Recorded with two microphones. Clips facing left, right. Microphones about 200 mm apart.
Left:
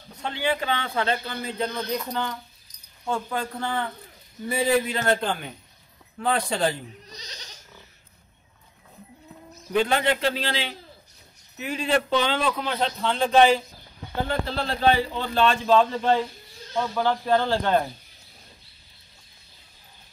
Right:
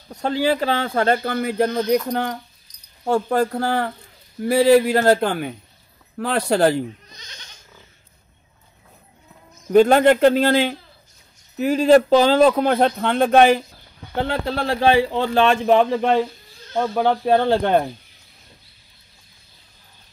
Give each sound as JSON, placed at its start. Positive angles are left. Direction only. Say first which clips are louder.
{"t": 0.1, "sound": "speech", "louder": "right 7 dB", "side_deg": -40}
{"t": 3.5, "sound": "speech", "louder": "right 7 dB", "side_deg": -75}
{"t": 7.1, "sound": "goat", "louder": "left 3 dB", "side_deg": 35}
{"t": 9.7, "sound": "speech", "louder": "right 10 dB", "side_deg": -45}
{"t": 11.5, "sound": "speech", "louder": "right 11 dB", "side_deg": -40}
{"t": 14.2, "sound": "speech", "louder": "right 4 dB", "side_deg": -70}
{"t": 16.7, "sound": "speech", "louder": "right 5 dB", "side_deg": -50}